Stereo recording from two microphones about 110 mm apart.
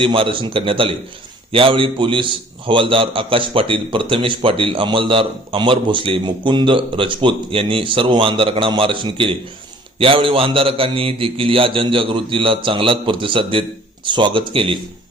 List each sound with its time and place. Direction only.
0.0 s a man's voice: 55° right (ahead or behind)